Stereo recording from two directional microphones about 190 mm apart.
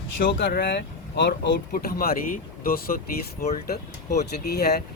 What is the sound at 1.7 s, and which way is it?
Speech, 50° left (ahead or behind).